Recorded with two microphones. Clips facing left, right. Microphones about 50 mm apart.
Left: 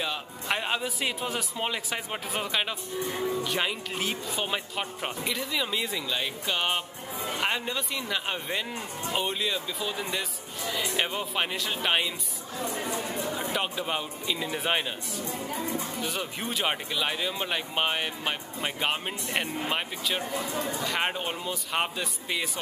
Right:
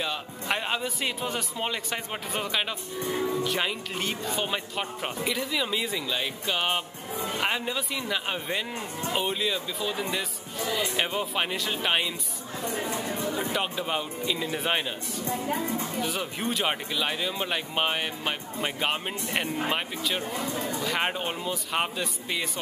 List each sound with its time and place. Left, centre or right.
0.0 s a man's voice: centre
13.5 s a man's voice: centre
20.5 s speech: left
20.8 s a man's voice: centre